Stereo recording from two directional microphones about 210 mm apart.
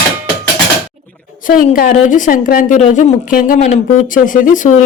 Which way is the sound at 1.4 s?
40° left (ahead or behind).